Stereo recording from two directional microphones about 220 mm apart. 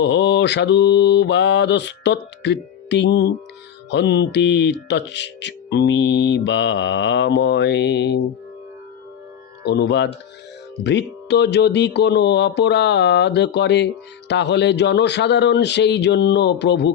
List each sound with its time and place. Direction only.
0.0 s speech: 55° left (ahead or behind)
9.6 s speech: 50° left (ahead or behind)